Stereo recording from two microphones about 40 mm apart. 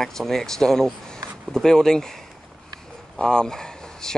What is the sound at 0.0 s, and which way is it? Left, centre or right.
Speech, centre.